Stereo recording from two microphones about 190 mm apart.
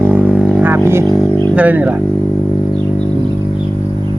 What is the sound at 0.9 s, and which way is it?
Speech, 15° right (ahead or behind).